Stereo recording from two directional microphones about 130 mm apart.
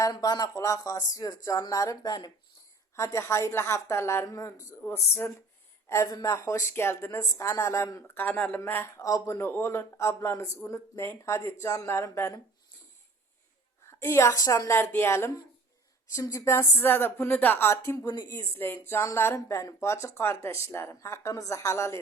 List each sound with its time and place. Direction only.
0.0 s speech: 30° left (ahead or behind)
4.8 s speech: 15° left (ahead or behind)
5.9 s speech: 25° left (ahead or behind)
9.0 s speech: 30° left (ahead or behind)
13.8 s speech: 20° left (ahead or behind)
18.0 s speech: 30° left (ahead or behind)
18.3 s speech: 20° left (ahead or behind)